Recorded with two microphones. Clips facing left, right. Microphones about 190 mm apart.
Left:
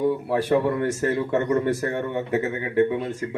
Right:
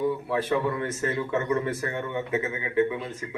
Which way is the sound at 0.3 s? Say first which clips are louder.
Left 5 dB; 40° left (ahead or behind).